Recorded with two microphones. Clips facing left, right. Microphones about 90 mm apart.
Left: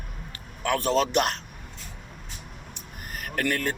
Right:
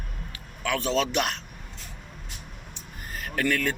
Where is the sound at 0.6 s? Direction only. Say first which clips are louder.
Left 2 dB; 45° left (ahead or behind).